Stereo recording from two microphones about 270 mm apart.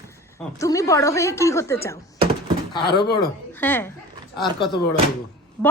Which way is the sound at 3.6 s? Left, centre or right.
Centre.